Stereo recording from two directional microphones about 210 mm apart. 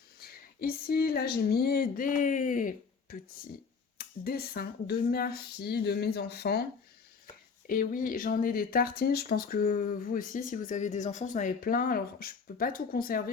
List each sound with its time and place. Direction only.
0.2 s speech: 45° left (ahead or behind)
7.7 s speech: 40° left (ahead or behind)